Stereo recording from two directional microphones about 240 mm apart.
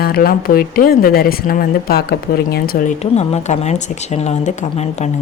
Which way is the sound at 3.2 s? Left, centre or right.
Left.